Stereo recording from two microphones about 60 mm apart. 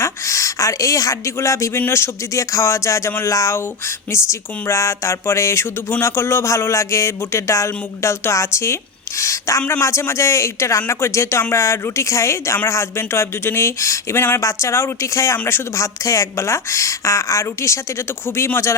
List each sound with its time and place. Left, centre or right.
0.0 s speech: left
14.2 s speech: left
14.4 s speech: left